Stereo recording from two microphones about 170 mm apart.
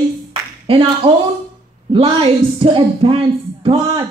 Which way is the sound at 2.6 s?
30° right (ahead or behind).